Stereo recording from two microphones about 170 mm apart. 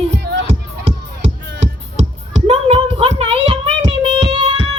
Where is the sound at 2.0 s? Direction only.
35° right (ahead or behind).